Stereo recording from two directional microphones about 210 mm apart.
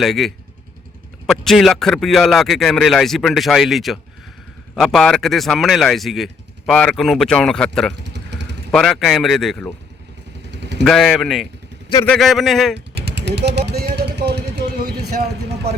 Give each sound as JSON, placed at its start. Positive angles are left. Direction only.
{"t": 0.0, "sound": "speech", "side_deg": 0}
{"t": 8.0, "sound": "vehicle", "side_deg": -55}
{"t": 8.7, "sound": "speech", "side_deg": 0}
{"t": 10.5, "sound": "vehicle", "side_deg": -55}
{"t": 10.8, "sound": "speech", "side_deg": 0}
{"t": 12.7, "sound": "vehicle", "side_deg": -50}